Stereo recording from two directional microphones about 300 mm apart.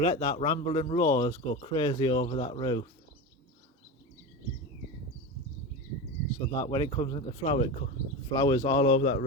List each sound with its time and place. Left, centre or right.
0.0 s speech: centre
6.6 s speech: centre